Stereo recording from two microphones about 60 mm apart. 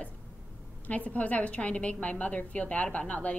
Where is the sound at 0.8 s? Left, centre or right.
Left.